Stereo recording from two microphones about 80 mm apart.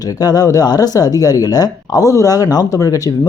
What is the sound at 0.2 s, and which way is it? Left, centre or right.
Speech, left.